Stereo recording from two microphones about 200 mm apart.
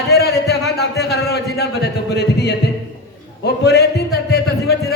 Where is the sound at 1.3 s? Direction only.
55° left (ahead or behind).